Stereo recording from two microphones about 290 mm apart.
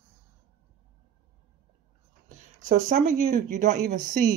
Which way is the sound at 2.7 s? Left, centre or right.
Right.